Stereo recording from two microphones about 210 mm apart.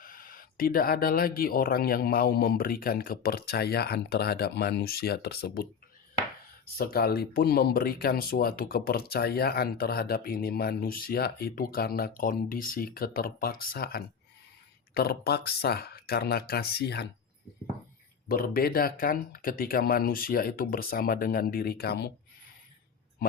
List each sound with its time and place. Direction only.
0.0 s speech: 40° left (ahead or behind)
6.7 s speech: 45° left (ahead or behind)
18.3 s speech: 45° left (ahead or behind)